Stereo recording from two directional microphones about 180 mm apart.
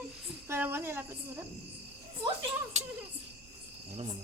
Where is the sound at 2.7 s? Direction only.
40° right (ahead or behind).